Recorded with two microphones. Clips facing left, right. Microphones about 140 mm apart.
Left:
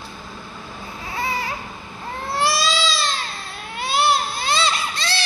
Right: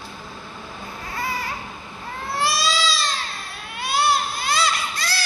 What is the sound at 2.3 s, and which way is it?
Baby cry, 25° left (ahead or behind).